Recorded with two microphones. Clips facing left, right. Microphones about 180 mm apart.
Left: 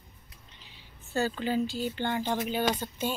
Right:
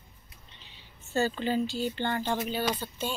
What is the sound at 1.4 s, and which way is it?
Speech, 10° left (ahead or behind).